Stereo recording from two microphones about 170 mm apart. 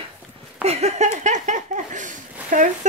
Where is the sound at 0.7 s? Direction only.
40° right (ahead or behind).